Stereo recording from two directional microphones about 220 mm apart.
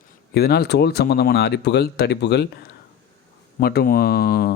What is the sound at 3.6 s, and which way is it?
Speech, 45° left (ahead or behind).